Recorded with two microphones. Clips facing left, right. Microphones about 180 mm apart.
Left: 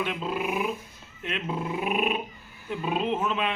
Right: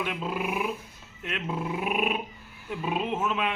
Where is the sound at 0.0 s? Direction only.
5° right (ahead or behind).